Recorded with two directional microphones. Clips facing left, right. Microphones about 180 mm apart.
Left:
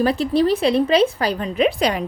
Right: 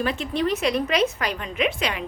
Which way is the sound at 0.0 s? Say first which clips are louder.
Left 7 dB; 35° left (ahead or behind).